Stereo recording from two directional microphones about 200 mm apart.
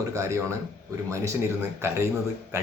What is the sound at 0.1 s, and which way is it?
Speech, 15° right (ahead or behind).